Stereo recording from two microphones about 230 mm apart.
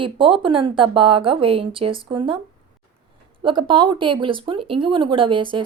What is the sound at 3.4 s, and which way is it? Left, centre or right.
A woman's voice, right.